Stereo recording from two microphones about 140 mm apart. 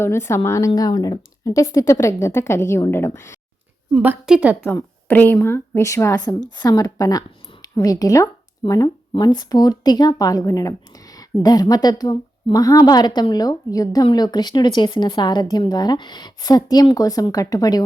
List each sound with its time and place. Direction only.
0.0 s speech: 20° left (ahead or behind)
3.9 s a woman's voice: 10° right (ahead or behind)
4.6 s speech: 15° left (ahead or behind)